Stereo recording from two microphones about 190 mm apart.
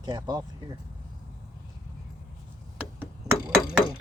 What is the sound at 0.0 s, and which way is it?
Speech, 20° right (ahead or behind).